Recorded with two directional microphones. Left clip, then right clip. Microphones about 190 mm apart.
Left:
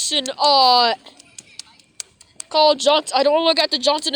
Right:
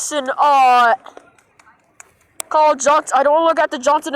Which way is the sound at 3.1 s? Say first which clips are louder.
Right 3 dB; 20° left (ahead or behind).